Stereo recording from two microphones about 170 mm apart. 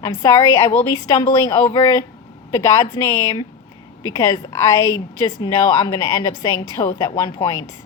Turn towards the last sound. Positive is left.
turn(degrees=20)  # may be behind; listen again after turning